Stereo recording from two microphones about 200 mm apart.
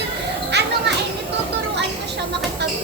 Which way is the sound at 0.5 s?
55° right (ahead or behind).